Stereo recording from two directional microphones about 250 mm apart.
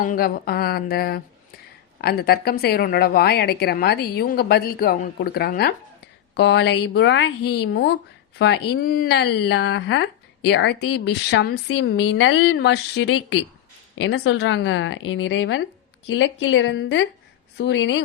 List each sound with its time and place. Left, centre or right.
0.0 s a woman's voice: left